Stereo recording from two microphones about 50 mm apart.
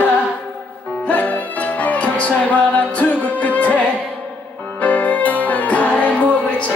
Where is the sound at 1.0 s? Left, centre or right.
Left.